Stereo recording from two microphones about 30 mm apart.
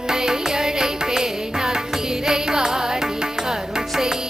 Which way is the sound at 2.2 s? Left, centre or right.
Right.